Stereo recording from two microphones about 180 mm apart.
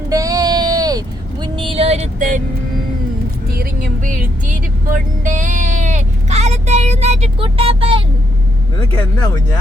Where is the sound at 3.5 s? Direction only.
55° right (ahead or behind); by 8.0 s 30° right (ahead or behind).